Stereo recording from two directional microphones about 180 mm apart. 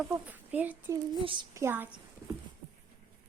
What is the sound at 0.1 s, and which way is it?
Speech, 10° right (ahead or behind).